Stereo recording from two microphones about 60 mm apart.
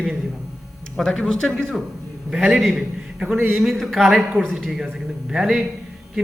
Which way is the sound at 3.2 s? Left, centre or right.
Right.